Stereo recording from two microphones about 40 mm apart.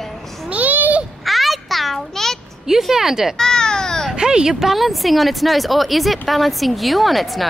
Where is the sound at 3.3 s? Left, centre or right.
Centre.